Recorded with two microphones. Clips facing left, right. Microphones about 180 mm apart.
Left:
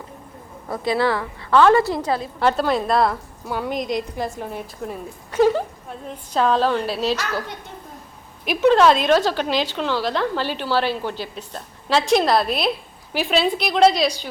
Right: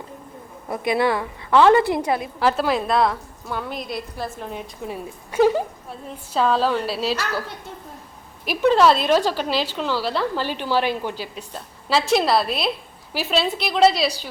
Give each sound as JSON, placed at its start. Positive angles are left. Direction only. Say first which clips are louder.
{"t": 0.7, "sound": "a woman's voice", "louder": "even", "side_deg": -20}
{"t": 2.4, "sound": "a woman's voice", "louder": "left 2 dB", "side_deg": -5}
{"t": 3.4, "sound": "a woman's voice", "louder": "left 5 dB", "side_deg": 10}
{"t": 5.3, "sound": "a sound", "louder": "even", "side_deg": -10}
{"t": 6.1, "sound": "a woman's voice", "louder": "left 1 dB", "side_deg": -5}